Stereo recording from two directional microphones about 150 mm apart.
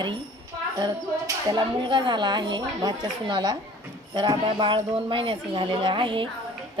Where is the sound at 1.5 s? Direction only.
30° right (ahead or behind).